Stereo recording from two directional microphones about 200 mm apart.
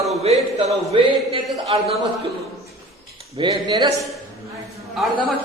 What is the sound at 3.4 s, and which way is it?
Speech, 20° right (ahead or behind).